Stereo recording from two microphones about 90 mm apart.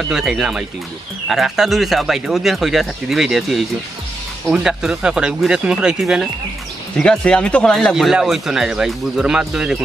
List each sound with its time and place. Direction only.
0.1 s speech: 5° right (ahead or behind)
7.0 s speech: 10° left (ahead or behind)
7.9 s speech: 5° right (ahead or behind)